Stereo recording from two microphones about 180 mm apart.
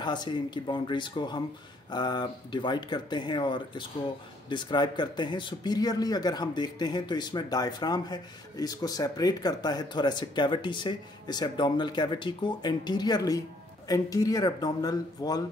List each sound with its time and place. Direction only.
0.0 s speech: 25° left (ahead or behind)